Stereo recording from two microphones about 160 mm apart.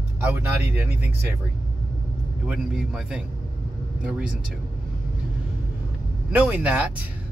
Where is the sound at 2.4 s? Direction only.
5° right (ahead or behind).